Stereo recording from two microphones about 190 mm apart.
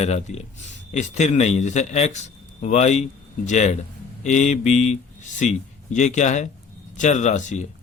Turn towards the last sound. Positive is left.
turn(degrees=40)  # may be behind; listen again after turning